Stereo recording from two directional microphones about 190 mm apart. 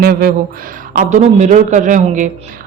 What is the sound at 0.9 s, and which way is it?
A woman's voice, 40° right (ahead or behind).